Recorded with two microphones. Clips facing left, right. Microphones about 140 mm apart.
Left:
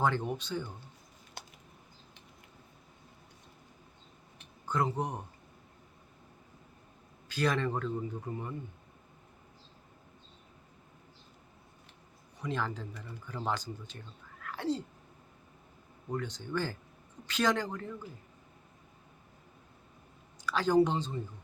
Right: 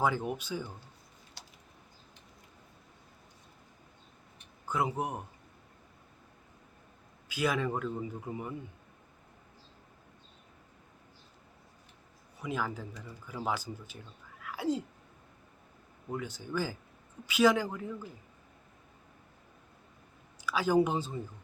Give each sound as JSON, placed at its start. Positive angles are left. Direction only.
{"t": 0.0, "sound": "speech", "side_deg": -5}
{"t": 1.4, "sound": "a sound", "side_deg": 55}
{"t": 4.6, "sound": "speech", "side_deg": -10}
{"t": 7.3, "sound": "speech", "side_deg": -10}
{"t": 12.4, "sound": "speech", "side_deg": -10}
{"t": 14.4, "sound": "a sound", "side_deg": -10}
{"t": 16.0, "sound": "speech", "side_deg": -5}
{"t": 20.4, "sound": "speech", "side_deg": -10}